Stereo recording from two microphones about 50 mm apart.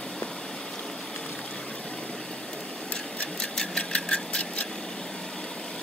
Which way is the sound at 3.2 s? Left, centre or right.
Centre.